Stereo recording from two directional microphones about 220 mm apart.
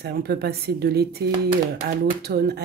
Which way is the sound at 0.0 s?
45° right (ahead or behind).